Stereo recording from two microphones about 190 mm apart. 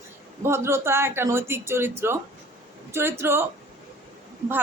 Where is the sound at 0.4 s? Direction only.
15° right (ahead or behind).